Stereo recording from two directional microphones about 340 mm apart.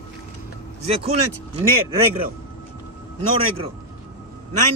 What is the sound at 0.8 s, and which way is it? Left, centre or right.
Speech, centre.